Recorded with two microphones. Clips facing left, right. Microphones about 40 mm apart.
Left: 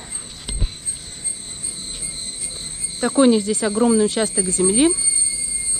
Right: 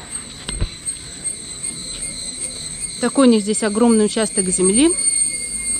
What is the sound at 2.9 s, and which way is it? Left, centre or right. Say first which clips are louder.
Speech: right 2 dB; right.